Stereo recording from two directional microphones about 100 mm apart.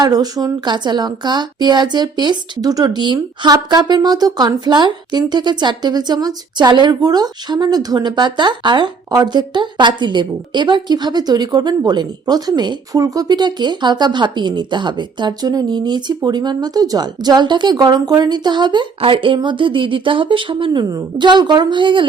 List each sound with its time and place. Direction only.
0.0 s a woman's voice: 40° right (ahead or behind)
18.9 s speech: 60° right (ahead or behind)
20.9 s a woman's voice: 50° right (ahead or behind)